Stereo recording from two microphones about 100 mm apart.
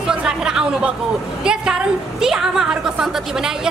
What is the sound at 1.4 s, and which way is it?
A man's voice, 5° right (ahead or behind).